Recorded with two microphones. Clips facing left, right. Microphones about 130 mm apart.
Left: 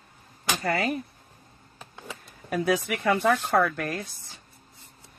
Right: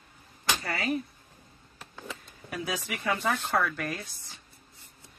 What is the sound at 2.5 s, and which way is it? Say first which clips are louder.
Speech: left 9 dB; 60° left (ahead or behind).